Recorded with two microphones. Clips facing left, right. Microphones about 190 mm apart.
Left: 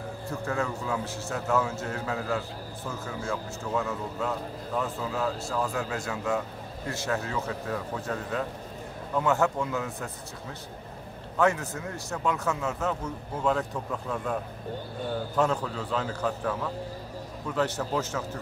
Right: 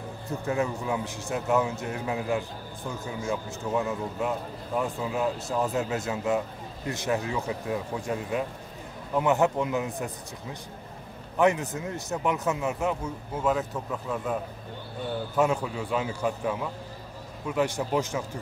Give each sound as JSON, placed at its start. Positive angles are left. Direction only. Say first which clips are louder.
{"t": 0.3, "sound": "a man's voice", "louder": "right 3 dB", "side_deg": -20}
{"t": 11.3, "sound": "a man's voice", "louder": "right 2 dB", "side_deg": -15}
{"t": 15.3, "sound": "a man's voice", "louder": "right 2 dB", "side_deg": -10}